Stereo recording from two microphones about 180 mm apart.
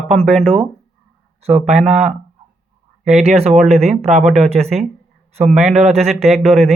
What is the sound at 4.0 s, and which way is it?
Speech, 40° right (ahead or behind).